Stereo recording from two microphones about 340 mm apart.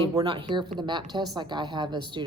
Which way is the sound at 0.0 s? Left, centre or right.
Centre.